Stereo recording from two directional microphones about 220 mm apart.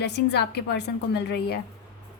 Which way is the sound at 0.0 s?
50° left (ahead or behind).